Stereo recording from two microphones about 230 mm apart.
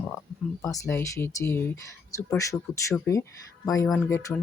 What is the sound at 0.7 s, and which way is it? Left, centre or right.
Speech, centre.